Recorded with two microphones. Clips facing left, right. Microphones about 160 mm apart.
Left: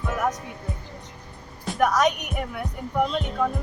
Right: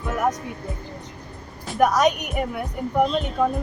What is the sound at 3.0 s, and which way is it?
Speech, 20° right (ahead or behind).